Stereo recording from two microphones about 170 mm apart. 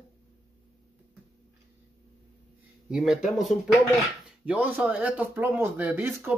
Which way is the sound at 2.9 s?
5° right (ahead or behind).